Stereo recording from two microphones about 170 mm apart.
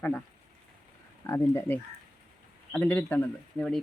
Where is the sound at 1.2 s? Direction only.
15° left (ahead or behind).